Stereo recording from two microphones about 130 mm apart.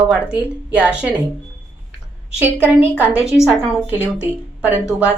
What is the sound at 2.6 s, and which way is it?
A woman's voice, 15° right (ahead or behind).